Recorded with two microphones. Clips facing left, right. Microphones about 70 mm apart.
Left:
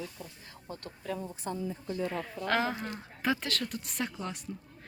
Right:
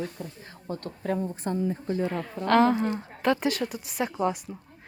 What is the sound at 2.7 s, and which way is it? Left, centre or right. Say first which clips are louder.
Speech: right 11 dB; right.